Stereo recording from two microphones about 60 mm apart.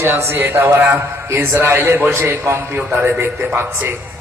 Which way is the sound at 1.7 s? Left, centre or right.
Right.